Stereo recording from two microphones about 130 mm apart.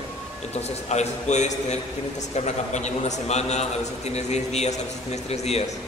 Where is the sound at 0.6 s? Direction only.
60° left (ahead or behind).